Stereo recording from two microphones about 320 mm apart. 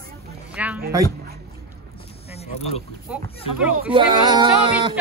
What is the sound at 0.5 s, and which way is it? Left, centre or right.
Speech, centre.